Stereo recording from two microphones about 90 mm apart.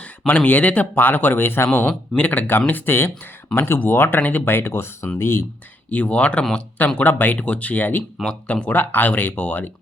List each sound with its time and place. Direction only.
0.3 s speech: 15° left (ahead or behind)
5.9 s speech: 15° left (ahead or behind)